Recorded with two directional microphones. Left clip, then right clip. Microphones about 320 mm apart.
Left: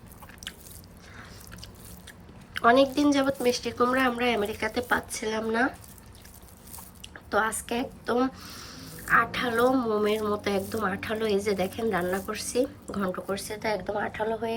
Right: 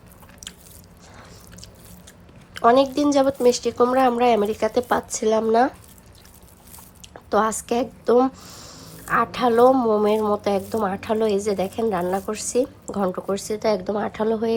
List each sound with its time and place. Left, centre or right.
2.5 s a woman's voice: centre
7.1 s a woman's voice: centre